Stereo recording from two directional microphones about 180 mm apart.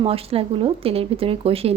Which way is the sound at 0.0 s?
30° right (ahead or behind).